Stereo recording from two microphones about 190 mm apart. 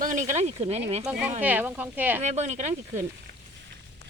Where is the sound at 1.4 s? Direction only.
10° right (ahead or behind).